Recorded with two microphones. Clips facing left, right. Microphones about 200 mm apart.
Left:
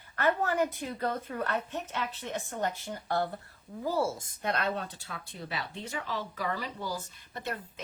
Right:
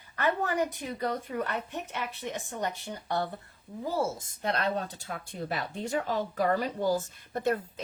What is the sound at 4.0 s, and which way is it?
Speech, 30° right (ahead or behind).